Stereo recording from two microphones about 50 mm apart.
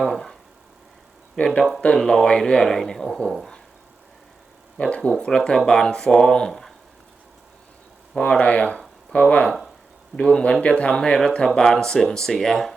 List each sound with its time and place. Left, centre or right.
0.0 s a man's voice: centre
1.4 s a man's voice: centre
5.1 s speech: left
5.4 s a man's voice: centre
8.3 s a man's voice: left